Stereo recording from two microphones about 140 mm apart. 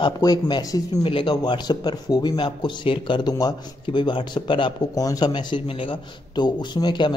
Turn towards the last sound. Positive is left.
turn(degrees=30)  # may be behind; listen again after turning